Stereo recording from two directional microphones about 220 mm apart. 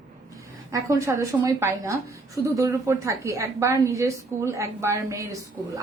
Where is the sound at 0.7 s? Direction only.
15° right (ahead or behind).